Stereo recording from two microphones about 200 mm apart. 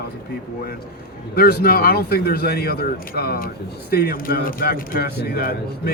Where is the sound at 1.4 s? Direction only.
55° left (ahead or behind).